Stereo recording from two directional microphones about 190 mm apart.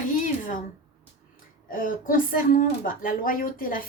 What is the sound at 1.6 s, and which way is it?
A woman's voice, 45° left (ahead or behind).